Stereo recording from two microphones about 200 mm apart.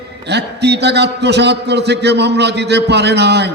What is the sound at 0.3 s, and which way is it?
A man's voice, 55° right (ahead or behind).